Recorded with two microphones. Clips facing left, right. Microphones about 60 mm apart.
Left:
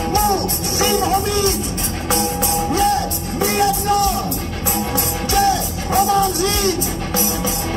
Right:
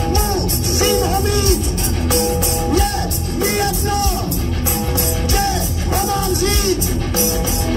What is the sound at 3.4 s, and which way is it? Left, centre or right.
Music, left.